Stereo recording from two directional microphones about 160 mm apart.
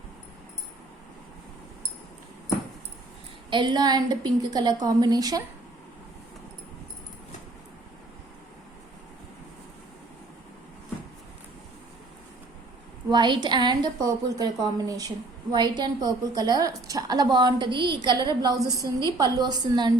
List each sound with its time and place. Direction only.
3.5 s a woman's voice: 30° right (ahead or behind)
13.1 s a woman's voice: 30° right (ahead or behind)